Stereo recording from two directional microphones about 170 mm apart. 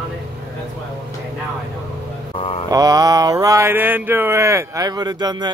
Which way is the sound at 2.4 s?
35° left (ahead or behind).